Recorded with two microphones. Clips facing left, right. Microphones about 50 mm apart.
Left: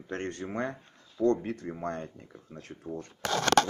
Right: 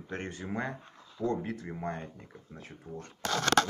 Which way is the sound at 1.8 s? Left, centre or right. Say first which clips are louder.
Left 2 dB; centre.